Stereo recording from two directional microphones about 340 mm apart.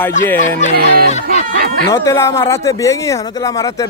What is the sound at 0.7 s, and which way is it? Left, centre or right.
Speech, right.